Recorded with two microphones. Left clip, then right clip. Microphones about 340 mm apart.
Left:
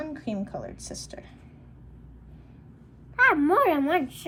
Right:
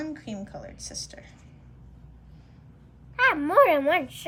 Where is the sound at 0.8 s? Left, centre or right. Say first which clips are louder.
Right 1 dB; centre.